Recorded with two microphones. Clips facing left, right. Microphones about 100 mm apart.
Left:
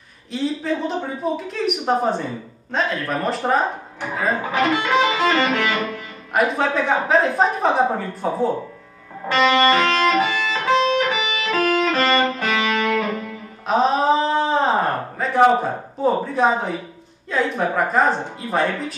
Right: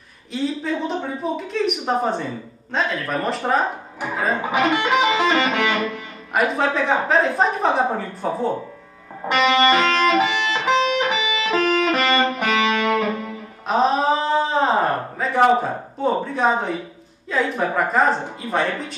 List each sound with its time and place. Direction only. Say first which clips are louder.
0.3 s a woman's voice: left 1 dB; centre (ahead or behind)
4.4 s music: right 2 dB; 15° right (ahead or behind)
6.3 s a woman's voice: left 1 dB; centre (ahead or behind)
9.3 s music: even; 20° right (ahead or behind)
13.7 s a sound: left 1 dB; centre (ahead or behind)
17.3 s a woman's voice: even; centre (ahead or behind)